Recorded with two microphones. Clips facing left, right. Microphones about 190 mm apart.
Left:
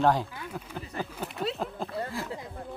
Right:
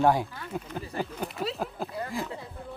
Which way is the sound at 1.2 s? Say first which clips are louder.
Even; centre (ahead or behind).